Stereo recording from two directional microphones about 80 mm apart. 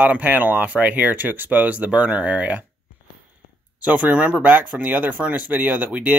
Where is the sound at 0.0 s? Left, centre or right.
Centre.